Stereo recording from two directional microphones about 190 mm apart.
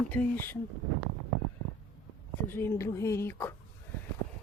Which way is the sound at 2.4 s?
15° left (ahead or behind).